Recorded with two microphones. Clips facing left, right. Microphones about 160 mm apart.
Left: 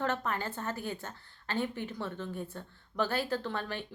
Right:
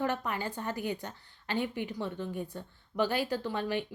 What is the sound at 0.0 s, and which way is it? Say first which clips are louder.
A woman's voice: right 1 dB; 15° right (ahead or behind).